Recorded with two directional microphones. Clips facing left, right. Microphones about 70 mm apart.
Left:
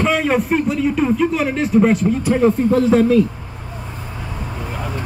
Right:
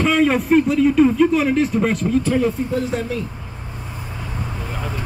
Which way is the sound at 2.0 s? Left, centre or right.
Centre.